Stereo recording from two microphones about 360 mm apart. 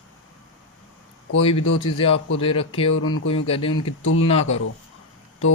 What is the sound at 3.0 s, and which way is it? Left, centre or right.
Speech, left.